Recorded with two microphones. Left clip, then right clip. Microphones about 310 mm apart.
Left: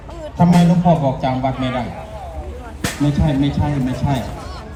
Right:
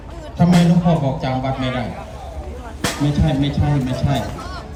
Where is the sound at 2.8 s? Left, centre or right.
Right.